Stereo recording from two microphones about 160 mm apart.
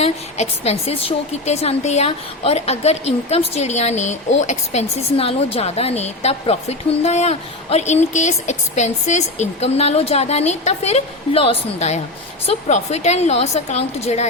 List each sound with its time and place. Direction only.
0.0 s a woman's voice: 40° left (ahead or behind)